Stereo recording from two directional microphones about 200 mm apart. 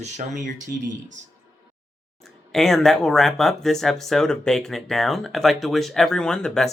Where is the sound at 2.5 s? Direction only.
Centre (ahead or behind).